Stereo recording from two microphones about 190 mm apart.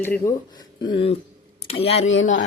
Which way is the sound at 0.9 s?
30° left (ahead or behind).